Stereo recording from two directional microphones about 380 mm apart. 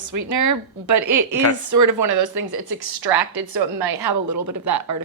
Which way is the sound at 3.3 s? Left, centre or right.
Right.